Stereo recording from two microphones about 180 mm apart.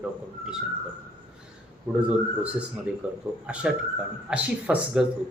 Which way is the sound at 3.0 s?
10° right (ahead or behind).